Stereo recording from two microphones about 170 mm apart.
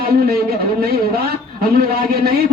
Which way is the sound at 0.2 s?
65° right (ahead or behind).